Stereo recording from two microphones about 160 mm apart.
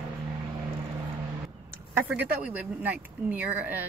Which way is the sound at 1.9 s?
10° right (ahead or behind).